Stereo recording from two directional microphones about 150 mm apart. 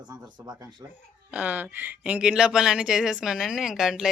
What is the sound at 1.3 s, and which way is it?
Speech, 10° right (ahead or behind).